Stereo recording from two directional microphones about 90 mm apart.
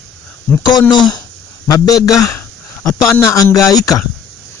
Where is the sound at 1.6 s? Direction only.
40° left (ahead or behind).